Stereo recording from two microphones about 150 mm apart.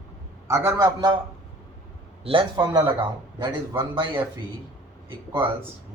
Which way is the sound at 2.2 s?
35° right (ahead or behind).